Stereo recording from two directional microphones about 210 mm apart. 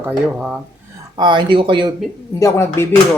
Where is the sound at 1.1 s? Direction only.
20° right (ahead or behind).